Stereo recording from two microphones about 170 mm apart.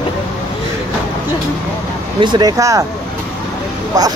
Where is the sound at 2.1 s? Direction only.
25° right (ahead or behind).